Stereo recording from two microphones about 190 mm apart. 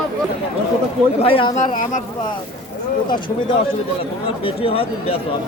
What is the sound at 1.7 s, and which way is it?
Speech, 45° left (ahead or behind).